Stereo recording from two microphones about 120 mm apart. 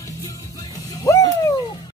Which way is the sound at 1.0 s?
30° left (ahead or behind).